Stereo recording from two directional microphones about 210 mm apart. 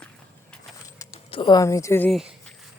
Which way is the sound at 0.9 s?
15° left (ahead or behind).